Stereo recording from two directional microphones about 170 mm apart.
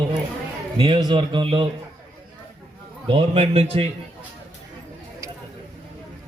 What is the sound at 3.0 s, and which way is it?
Speech, 35° right (ahead or behind).